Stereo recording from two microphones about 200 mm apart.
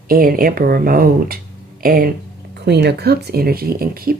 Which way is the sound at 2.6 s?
55° right (ahead or behind).